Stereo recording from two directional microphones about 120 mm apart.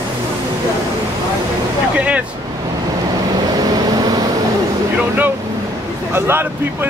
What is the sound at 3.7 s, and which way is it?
Vehicle, 35° right (ahead or behind).